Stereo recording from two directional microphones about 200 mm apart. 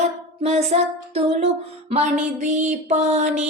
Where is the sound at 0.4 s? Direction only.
30° right (ahead or behind).